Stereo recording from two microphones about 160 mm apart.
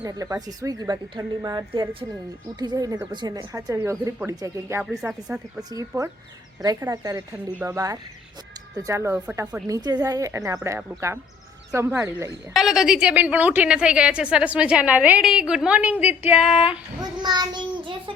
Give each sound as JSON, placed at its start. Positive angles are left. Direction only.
{"t": 0.0, "sound": "a woman's voice", "side_deg": -20}
{"t": 4.8, "sound": "a woman's voice", "side_deg": -10}
{"t": 12.5, "sound": "a woman's voice", "side_deg": 0}
{"t": 17.0, "sound": "a woman's voice", "side_deg": -25}